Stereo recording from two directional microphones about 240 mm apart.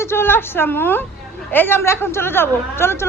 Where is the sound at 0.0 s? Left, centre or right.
Centre.